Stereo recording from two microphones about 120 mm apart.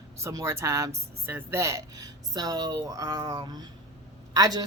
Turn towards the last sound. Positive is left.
turn(degrees=-30)  # may be behind; listen again after turning